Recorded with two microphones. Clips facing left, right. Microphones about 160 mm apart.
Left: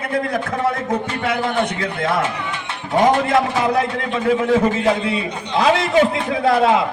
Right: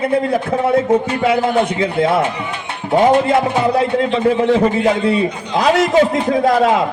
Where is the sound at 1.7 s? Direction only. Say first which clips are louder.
Right 6 dB; 25° right (ahead or behind).